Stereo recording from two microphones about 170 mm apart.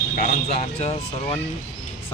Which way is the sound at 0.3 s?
40° left (ahead or behind).